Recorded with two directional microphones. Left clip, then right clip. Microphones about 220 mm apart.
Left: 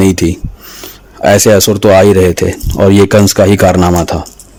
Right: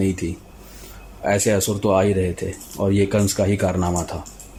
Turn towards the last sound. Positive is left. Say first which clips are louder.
# left 14 dB
turn(degrees=45)  # may be behind; listen again after turning